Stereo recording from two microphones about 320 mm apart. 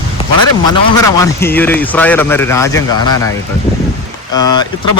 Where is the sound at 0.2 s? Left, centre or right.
Centre.